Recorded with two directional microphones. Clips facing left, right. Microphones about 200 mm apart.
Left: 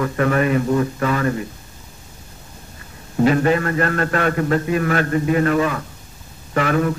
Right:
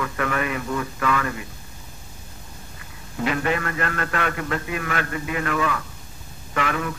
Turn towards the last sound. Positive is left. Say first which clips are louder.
# left 7 dB
turn(degrees=40)  # may be behind; listen again after turning